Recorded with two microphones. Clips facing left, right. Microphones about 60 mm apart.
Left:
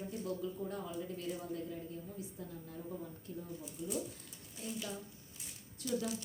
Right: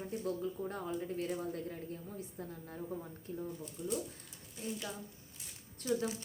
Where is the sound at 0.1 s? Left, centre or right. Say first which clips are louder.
Right 4 dB; right.